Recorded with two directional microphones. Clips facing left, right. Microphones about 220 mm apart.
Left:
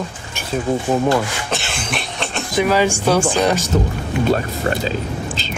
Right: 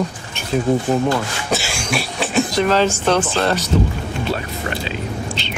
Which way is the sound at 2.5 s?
10° left (ahead or behind).